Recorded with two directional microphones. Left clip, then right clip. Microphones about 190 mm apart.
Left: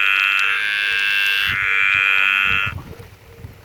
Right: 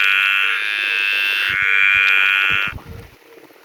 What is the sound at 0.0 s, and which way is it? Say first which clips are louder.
Frog: right 1 dB; 45° right (ahead or behind).